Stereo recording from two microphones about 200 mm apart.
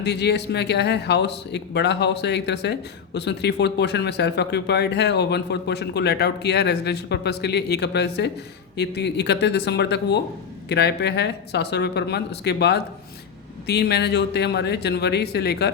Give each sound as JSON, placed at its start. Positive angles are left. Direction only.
{"t": 0.0, "sound": "speech", "side_deg": 55}